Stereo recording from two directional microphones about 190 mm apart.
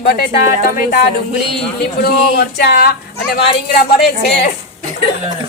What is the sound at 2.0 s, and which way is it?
Speech, 60° left (ahead or behind).